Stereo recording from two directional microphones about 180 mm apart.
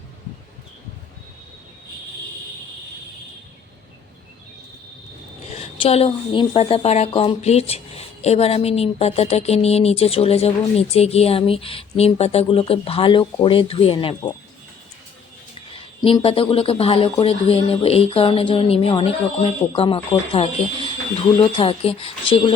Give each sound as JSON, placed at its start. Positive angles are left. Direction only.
{"t": 5.5, "sound": "a woman's voice", "side_deg": 30}
{"t": 15.7, "sound": "a woman's voice", "side_deg": 30}